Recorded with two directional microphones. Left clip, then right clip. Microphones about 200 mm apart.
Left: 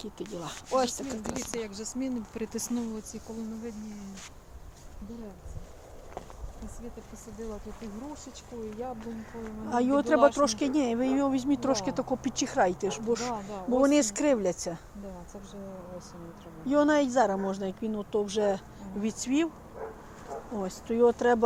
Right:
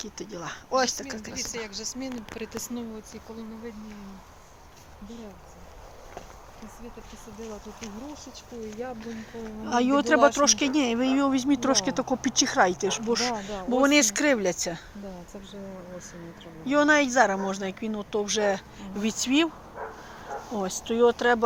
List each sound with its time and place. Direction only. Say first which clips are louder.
0.0 s a woman's voice: right 2 dB; 10° left (ahead or behind)
1.6 s speech: right 1 dB; 55° left (ahead or behind)
9.6 s speech: right 3 dB; 5° right (ahead or behind)
13.5 s speech: right 2 dB; 30° right (ahead or behind)
13.7 s speech: right 3 dB; 5° left (ahead or behind)
16.6 s a woman's voice: right 3 dB; 5° left (ahead or behind)
19.0 s speech: right 5 dB; 5° right (ahead or behind)
20.5 s speech: right 4 dB; 10° right (ahead or behind)